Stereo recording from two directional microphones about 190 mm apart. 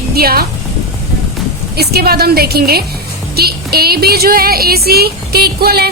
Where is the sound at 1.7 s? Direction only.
55° right (ahead or behind).